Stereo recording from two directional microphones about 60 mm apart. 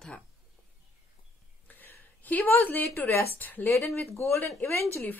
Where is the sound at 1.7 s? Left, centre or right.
Left.